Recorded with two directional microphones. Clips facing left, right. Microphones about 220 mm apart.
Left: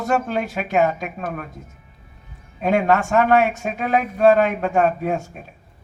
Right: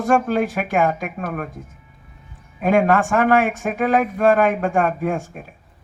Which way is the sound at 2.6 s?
50° right (ahead or behind).